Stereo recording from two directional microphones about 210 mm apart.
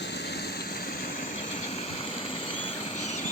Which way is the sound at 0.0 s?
55° left (ahead or behind).